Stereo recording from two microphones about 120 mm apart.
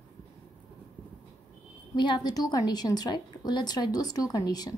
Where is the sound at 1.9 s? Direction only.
40° left (ahead or behind).